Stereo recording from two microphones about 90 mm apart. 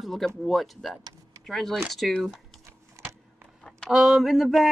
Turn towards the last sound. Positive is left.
turn(degrees=-5)  # may be behind; listen again after turning